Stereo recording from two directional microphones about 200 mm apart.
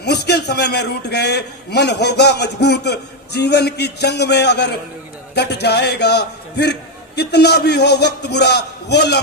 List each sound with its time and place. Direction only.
0.0 s a man's voice: 55° left (ahead or behind)